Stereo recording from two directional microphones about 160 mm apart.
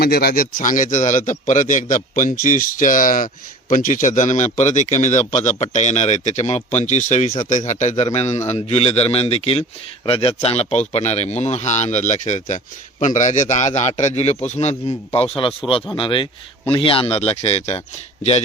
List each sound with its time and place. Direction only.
0.0 s a man's voice: 75° left (ahead or behind); by 18.4 s 45° left (ahead or behind)